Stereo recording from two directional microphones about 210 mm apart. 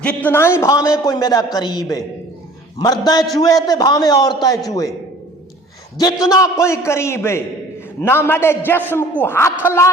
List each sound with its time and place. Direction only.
0.0 s a man's voice: 5° left (ahead or behind)
6.2 s a man's voice: 15° left (ahead or behind)